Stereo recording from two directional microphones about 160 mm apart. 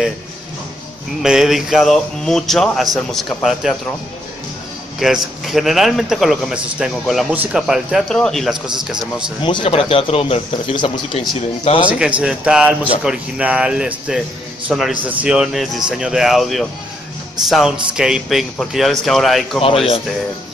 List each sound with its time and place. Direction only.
1.2 s a man's voice: 5° right (ahead or behind)
4.9 s a man's voice: centre (ahead or behind)
9.4 s speech: 30° left (ahead or behind)
11.9 s a man's voice: 5° right (ahead or behind)
19.6 s speech: 35° left (ahead or behind)